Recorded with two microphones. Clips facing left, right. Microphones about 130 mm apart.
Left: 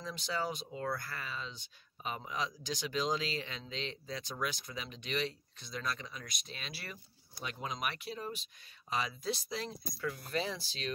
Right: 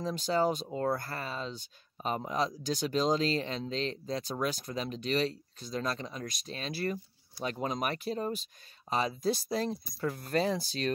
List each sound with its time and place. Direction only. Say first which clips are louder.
0.0 s speech: right 9 dB; 40° right (ahead or behind)